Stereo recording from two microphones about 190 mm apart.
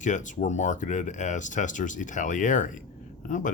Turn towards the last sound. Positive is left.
turn(degrees=45)  # may be behind; listen again after turning